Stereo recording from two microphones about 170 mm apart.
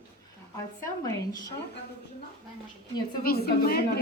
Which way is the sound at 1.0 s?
20° left (ahead or behind).